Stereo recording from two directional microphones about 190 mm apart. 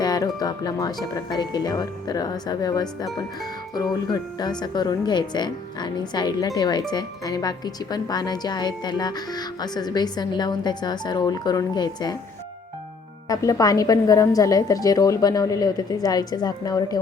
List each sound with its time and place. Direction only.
0.0 s speech: 20° left (ahead or behind)
3.9 s speech: 20° left (ahead or behind)
13.2 s speech: 20° left (ahead or behind)